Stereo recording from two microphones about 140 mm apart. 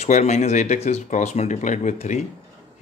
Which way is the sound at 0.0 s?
55° left (ahead or behind).